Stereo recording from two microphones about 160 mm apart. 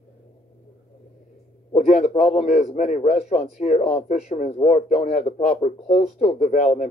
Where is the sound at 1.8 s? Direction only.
45° left (ahead or behind).